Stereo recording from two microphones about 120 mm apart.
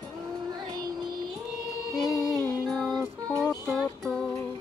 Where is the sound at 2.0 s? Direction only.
Centre (ahead or behind).